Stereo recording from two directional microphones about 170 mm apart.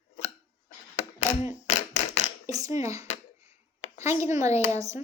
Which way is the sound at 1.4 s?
40° left (ahead or behind).